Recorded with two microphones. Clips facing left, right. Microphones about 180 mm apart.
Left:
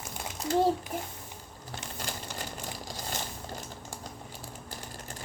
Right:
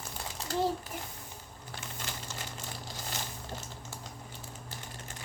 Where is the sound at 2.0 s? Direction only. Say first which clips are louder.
Left 5 dB; 40° left (ahead or behind).